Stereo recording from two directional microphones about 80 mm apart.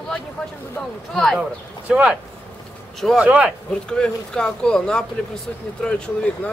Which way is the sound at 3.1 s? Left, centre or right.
Centre.